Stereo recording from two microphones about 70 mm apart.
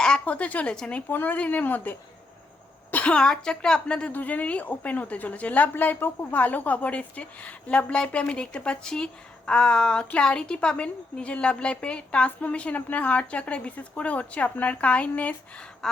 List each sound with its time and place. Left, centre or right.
0.0 s speech: centre
1.1 s a woman's voice: left
4.1 s a woman's voice: left
15.8 s a sound: centre